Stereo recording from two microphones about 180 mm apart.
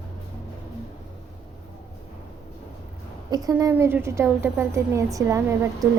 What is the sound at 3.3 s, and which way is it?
A woman's voice, 20° right (ahead or behind).